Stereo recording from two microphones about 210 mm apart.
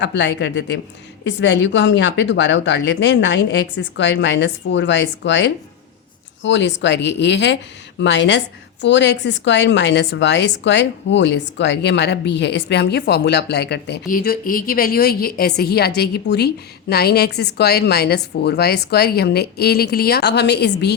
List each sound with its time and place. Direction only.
0.0 s a woman's voice: 55° left (ahead or behind)